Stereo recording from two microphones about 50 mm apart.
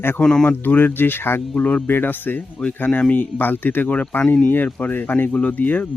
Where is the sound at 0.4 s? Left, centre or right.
Left.